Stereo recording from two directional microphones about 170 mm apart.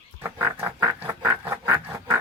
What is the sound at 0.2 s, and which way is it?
Pig, 15° right (ahead or behind).